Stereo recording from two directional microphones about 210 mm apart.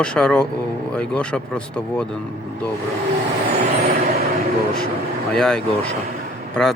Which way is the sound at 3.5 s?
50° right (ahead or behind).